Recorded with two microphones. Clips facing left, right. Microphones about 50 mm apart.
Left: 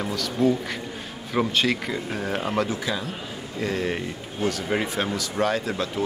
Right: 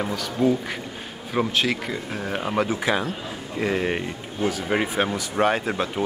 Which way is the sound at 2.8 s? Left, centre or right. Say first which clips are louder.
Right 5 dB; right.